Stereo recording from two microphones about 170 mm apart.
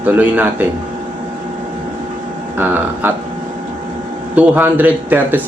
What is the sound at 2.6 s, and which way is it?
Speech, 10° right (ahead or behind).